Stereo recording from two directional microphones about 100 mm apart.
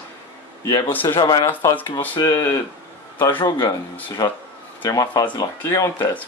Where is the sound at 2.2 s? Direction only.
35° left (ahead or behind).